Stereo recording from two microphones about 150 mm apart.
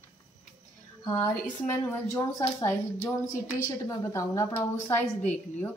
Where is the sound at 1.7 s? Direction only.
20° left (ahead or behind).